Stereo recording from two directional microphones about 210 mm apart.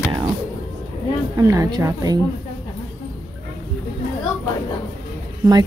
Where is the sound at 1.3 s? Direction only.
15° right (ahead or behind).